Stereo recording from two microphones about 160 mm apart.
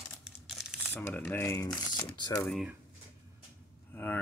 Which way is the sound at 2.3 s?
5° left (ahead or behind).